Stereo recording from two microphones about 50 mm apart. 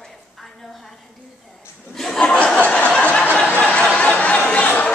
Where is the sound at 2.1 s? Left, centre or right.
Left.